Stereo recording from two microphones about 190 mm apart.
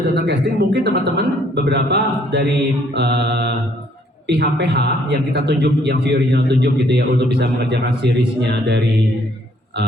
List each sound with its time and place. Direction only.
0.1 s a man's voice: 60° right (ahead or behind)